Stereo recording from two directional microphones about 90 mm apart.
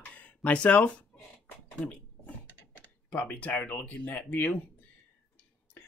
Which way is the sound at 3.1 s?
15° left (ahead or behind).